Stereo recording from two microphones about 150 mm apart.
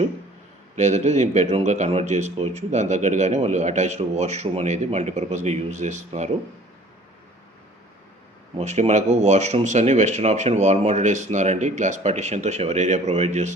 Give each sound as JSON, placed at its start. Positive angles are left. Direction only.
{"t": 0.8, "sound": "speech", "side_deg": -50}
{"t": 8.5, "sound": "speech", "side_deg": -45}